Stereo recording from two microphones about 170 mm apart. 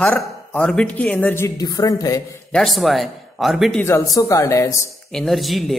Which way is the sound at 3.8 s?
15° left (ahead or behind).